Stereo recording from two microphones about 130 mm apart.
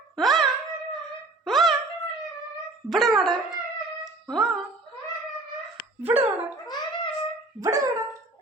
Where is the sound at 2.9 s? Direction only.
Centre (ahead or behind).